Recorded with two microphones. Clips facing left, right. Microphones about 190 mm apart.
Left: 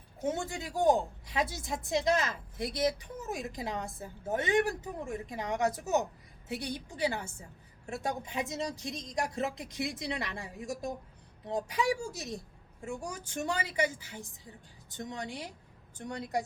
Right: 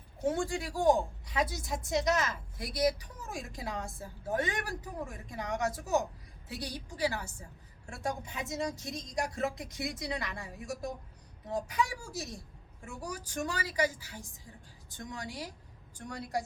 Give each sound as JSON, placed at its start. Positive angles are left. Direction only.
{"t": 0.3, "sound": "a woman's voice", "side_deg": 20}